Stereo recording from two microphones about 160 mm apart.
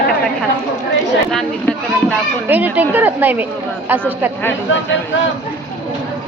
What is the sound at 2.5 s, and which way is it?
A woman's voice, 10° right (ahead or behind).